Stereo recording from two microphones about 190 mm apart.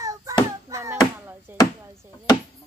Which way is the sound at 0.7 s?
15° right (ahead or behind).